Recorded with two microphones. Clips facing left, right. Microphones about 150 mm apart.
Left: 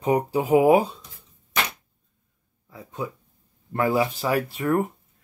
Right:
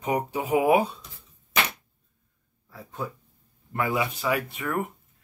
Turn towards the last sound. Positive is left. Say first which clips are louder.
# left 6 dB
turn(degrees=30)  # may be behind; listen again after turning